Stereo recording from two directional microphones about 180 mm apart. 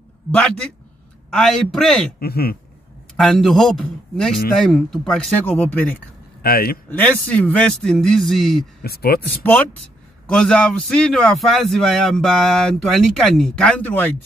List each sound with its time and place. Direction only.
0.3 s a man's voice: 5° left (ahead or behind)
2.1 s speech: 55° left (ahead or behind)
3.2 s a man's voice: centre (ahead or behind)
6.4 s speech: 55° left (ahead or behind)
6.9 s a man's voice: 10° left (ahead or behind)
8.8 s speech: 60° left (ahead or behind)
9.4 s a man's voice: 10° left (ahead or behind)